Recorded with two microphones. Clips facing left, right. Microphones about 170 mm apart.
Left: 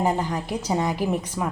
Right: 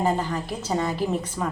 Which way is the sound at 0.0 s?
15° left (ahead or behind).